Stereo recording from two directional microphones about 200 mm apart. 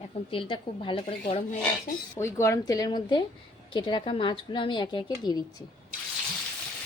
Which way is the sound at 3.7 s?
20° left (ahead or behind).